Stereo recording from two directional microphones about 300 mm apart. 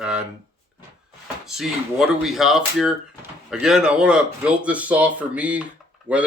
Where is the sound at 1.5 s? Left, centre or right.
Centre.